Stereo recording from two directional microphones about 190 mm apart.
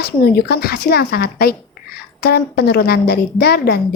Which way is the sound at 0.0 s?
55° left (ahead or behind).